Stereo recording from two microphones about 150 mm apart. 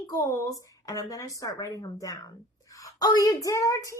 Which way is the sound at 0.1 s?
20° left (ahead or behind).